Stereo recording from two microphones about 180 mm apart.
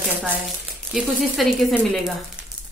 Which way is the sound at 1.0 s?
Centre (ahead or behind).